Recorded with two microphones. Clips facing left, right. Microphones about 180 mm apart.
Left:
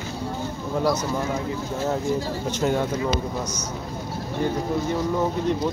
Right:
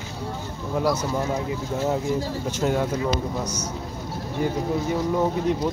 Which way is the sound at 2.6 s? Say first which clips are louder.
Even; 5° right (ahead or behind).